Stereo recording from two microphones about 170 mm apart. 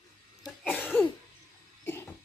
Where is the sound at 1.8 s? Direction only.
15° left (ahead or behind).